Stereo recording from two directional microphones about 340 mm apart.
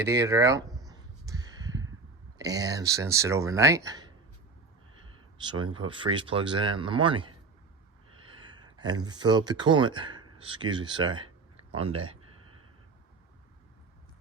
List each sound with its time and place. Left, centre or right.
0.0 s a sound: centre
2.4 s speech: centre
5.4 s speech: centre
8.7 s speech: centre